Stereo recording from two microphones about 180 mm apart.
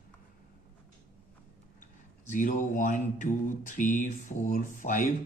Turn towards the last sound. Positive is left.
turn(degrees=45)  # may be behind; listen again after turning